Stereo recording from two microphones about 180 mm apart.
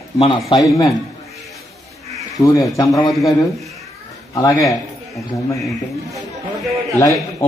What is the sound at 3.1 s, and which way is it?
Speech, centre (ahead or behind).